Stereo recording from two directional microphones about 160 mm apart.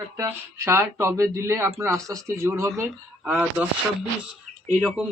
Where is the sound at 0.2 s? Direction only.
15° right (ahead or behind).